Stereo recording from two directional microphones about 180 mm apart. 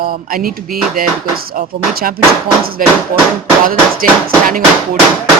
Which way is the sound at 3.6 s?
50° right (ahead or behind).